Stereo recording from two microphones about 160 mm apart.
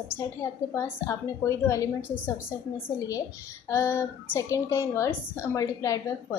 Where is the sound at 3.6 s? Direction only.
15° left (ahead or behind).